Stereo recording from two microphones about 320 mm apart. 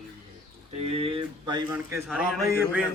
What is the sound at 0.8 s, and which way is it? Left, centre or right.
Speech, centre.